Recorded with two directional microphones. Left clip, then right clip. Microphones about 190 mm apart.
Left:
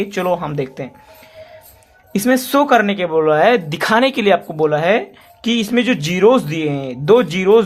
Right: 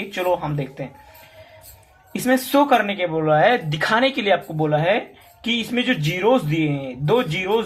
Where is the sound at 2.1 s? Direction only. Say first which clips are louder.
Left 4 dB; 60° left (ahead or behind).